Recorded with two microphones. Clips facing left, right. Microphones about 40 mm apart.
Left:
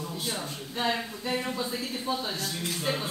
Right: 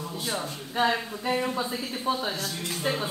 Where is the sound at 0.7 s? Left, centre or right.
Centre.